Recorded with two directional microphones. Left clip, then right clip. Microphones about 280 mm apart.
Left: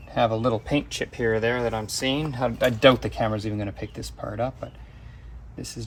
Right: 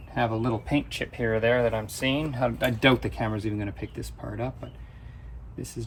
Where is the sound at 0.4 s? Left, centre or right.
Left.